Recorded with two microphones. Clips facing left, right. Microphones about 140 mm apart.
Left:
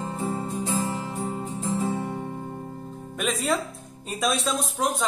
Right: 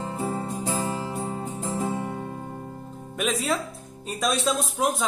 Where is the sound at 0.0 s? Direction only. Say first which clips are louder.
Even; 30° right (ahead or behind).